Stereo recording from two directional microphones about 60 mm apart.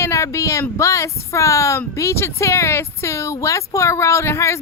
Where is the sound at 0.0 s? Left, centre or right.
Left.